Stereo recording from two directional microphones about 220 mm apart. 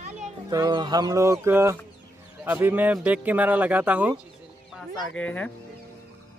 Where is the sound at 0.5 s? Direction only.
20° right (ahead or behind); by 5.5 s 5° left (ahead or behind).